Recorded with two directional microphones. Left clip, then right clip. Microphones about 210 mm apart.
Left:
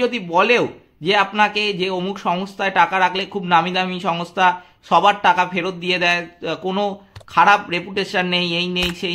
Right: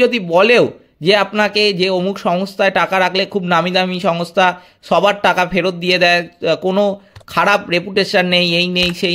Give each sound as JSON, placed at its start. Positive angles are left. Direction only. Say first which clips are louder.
{"t": 0.0, "sound": "a man's voice", "louder": "right 5 dB", "side_deg": -30}